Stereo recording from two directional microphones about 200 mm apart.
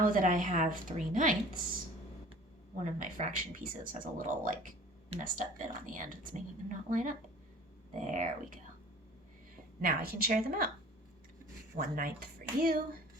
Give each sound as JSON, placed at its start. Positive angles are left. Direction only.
{"t": 0.0, "sound": "a woman's voice", "side_deg": -45}
{"t": 2.7, "sound": "a woman's voice", "side_deg": -40}
{"t": 9.8, "sound": "speech", "side_deg": -45}
{"t": 11.8, "sound": "speech", "side_deg": -45}